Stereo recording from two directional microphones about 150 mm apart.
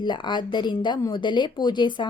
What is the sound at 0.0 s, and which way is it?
Speech, 30° left (ahead or behind).